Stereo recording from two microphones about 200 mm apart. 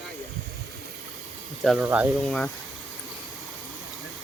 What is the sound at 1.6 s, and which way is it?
Speech, centre (ahead or behind).